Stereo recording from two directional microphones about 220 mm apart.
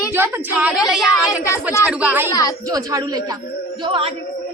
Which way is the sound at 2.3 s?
15° left (ahead or behind).